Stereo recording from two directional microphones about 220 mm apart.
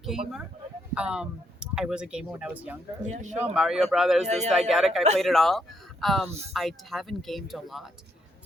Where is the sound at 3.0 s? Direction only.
30° right (ahead or behind).